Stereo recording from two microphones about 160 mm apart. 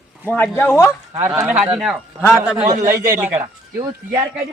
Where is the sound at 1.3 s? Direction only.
10° right (ahead or behind).